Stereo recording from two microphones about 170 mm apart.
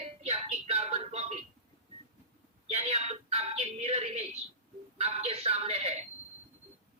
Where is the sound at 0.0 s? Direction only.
40° right (ahead or behind).